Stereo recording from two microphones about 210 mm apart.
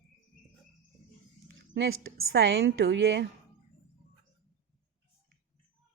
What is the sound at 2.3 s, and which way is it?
A woman's voice, 50° right (ahead or behind).